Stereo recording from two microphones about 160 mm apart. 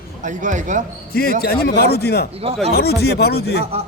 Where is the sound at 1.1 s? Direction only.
70° left (ahead or behind); by 3.7 s 90° left.